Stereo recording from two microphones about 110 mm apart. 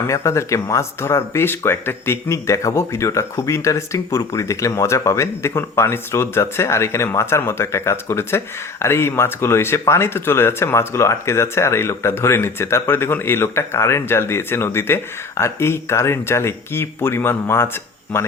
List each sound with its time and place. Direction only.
0.1 s speech: 25° left (ahead or behind)